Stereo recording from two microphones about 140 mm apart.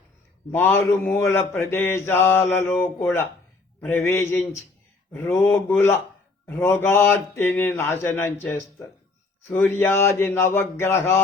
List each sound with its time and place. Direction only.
0.5 s speech: 15° left (ahead or behind)